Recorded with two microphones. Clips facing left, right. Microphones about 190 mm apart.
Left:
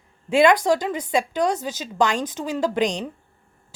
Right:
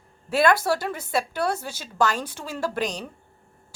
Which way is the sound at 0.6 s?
15° left (ahead or behind).